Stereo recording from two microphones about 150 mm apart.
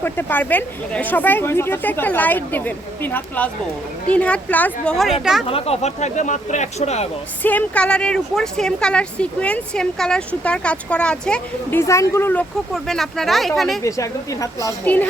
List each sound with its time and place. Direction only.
0.0 s a woman's voice: 15° left (ahead or behind); by 5.5 s 5° right (ahead or behind)
5.5 s speech: 40° left (ahead or behind)
7.4 s a woman's voice: 10° left (ahead or behind)
11.8 s a woman's voice: 20° left (ahead or behind)
12.7 s speech: centre (ahead or behind)
13.8 s a woman's voice: 20° left (ahead or behind)